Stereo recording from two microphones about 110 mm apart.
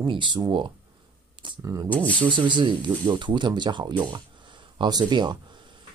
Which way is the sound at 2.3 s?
45° right (ahead or behind).